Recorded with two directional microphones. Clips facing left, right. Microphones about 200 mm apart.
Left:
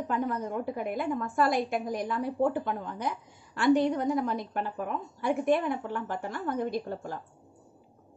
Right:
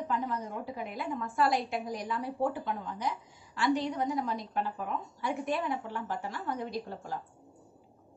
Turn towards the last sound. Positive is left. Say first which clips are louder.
# left 4 dB
turn(degrees=50)  # may be behind; listen again after turning